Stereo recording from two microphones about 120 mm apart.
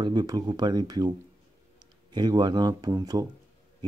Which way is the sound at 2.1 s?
35° right (ahead or behind).